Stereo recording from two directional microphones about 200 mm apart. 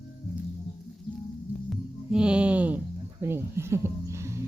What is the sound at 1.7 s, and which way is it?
Music, 5° right (ahead or behind).